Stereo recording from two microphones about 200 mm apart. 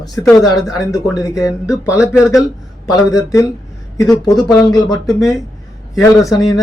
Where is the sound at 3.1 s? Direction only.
15° left (ahead or behind).